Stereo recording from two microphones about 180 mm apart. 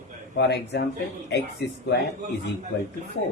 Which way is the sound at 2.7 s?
75° left (ahead or behind).